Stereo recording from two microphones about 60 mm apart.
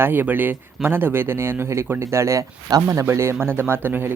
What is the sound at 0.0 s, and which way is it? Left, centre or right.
Speech, right.